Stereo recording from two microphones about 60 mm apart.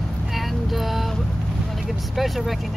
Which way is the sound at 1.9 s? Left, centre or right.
Centre.